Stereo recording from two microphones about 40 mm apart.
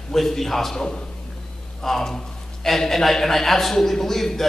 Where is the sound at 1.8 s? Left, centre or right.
Centre.